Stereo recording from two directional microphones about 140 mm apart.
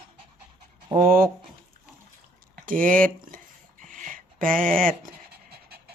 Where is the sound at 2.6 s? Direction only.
75° right (ahead or behind).